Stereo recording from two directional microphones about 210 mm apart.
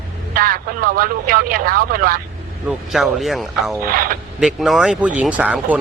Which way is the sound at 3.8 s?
45° right (ahead or behind).